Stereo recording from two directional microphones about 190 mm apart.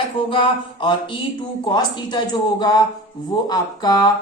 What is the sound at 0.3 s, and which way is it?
Speech, 25° left (ahead or behind).